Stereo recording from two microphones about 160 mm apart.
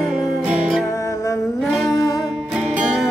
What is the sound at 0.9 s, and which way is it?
Music, 20° left (ahead or behind).